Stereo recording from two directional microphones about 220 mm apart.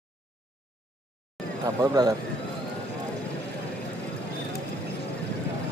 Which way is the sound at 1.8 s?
15° right (ahead or behind).